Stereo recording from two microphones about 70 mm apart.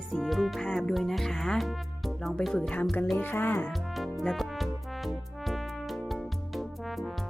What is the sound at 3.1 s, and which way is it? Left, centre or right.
Speech, left.